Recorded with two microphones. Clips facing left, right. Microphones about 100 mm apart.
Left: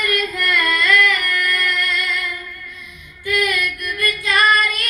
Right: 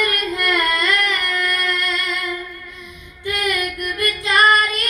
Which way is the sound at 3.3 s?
25° right (ahead or behind).